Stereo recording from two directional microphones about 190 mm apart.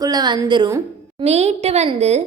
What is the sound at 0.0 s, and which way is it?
Speech, 20° right (ahead or behind).